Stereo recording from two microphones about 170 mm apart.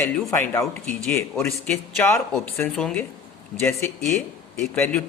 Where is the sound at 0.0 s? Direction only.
10° left (ahead or behind).